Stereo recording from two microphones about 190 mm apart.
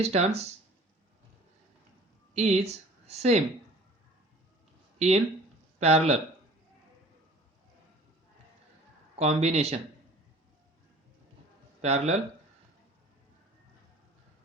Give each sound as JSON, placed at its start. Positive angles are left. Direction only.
{"t": 0.0, "sound": "a man's voice", "side_deg": -35}
{"t": 2.3, "sound": "speech", "side_deg": -35}
{"t": 4.9, "sound": "a man's voice", "side_deg": -35}
{"t": 9.1, "sound": "a man's voice", "side_deg": -35}
{"t": 11.8, "sound": "a man's voice", "side_deg": -35}